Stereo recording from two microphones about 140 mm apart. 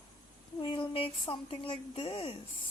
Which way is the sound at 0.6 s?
40° left (ahead or behind).